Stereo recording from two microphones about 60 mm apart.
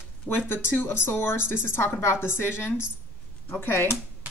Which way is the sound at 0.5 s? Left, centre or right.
Left.